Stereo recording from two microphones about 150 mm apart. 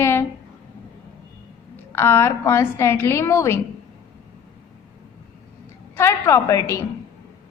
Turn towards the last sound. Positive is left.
turn(degrees=20)  # may be behind; listen again after turning